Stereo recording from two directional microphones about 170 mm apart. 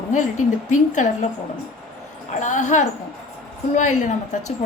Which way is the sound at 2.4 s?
45° left (ahead or behind).